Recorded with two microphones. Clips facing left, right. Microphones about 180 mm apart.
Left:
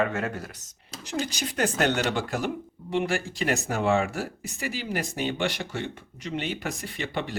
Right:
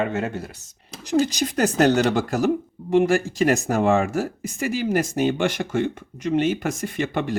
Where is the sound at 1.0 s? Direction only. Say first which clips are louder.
Right 10 dB; 40° right (ahead or behind).